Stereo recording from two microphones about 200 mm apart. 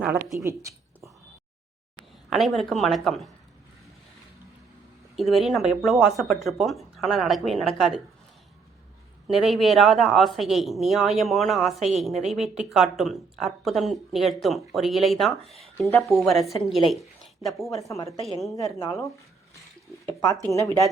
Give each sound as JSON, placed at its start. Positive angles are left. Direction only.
{"t": 0.3, "sound": "speech", "side_deg": -15}
{"t": 2.3, "sound": "speech", "side_deg": 0}
{"t": 5.1, "sound": "speech", "side_deg": 0}
{"t": 9.2, "sound": "speech", "side_deg": 0}
{"t": 17.8, "sound": "speech", "side_deg": 15}
{"t": 20.5, "sound": "speech", "side_deg": 15}